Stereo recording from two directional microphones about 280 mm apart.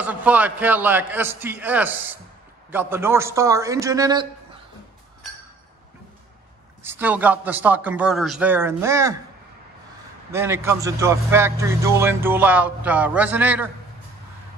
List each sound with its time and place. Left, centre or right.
0.0 s speech: centre
6.8 s speech: centre
10.3 s speech: centre